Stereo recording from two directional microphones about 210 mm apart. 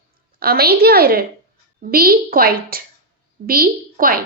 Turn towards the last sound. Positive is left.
turn(degrees=-45)  # may be behind; listen again after turning